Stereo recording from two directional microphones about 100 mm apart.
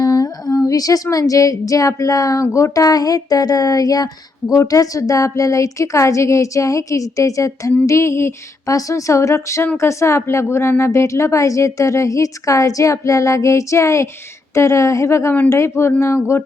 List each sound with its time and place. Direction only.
0.0 s humming: 40° left (ahead or behind)
1.3 s speech: 35° left (ahead or behind)